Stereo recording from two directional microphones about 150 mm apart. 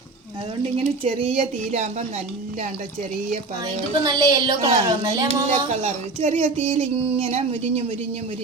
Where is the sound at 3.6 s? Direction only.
25° right (ahead or behind).